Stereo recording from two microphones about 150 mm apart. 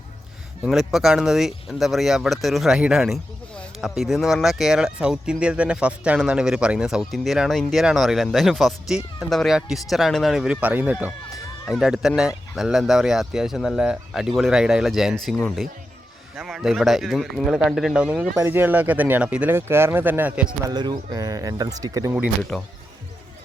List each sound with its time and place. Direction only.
0.6 s speech: 5° right (ahead or behind)
16.4 s speech: 5° right (ahead or behind)
20.7 s speech: 30° right (ahead or behind)
22.4 s speech: 5° left (ahead or behind)